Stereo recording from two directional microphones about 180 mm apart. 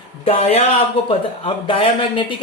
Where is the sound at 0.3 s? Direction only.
35° left (ahead or behind).